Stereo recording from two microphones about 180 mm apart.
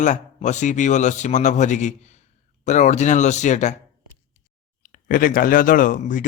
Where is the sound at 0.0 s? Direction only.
40° left (ahead or behind).